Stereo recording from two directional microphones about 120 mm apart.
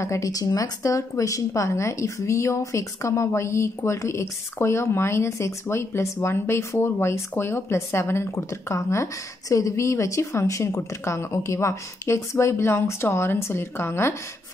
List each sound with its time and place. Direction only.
0.0 s speech: 25° left (ahead or behind)